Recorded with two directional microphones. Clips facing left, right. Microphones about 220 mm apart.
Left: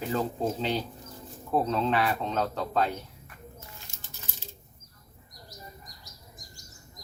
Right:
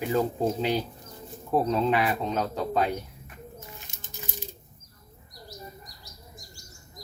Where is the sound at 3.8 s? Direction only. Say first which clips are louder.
Right 6 dB; 20° right (ahead or behind).